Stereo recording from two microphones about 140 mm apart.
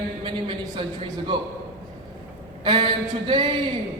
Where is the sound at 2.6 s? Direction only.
35° right (ahead or behind).